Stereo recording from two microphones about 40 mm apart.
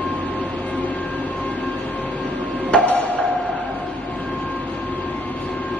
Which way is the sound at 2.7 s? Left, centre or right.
Left.